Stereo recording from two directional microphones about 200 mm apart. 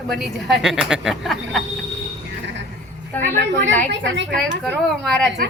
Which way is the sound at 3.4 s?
60° right (ahead or behind).